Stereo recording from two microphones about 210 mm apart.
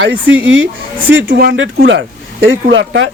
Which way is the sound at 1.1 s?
55° right (ahead or behind).